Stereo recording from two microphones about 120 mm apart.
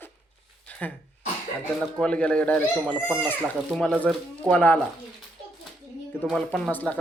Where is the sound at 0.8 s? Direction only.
15° left (ahead or behind).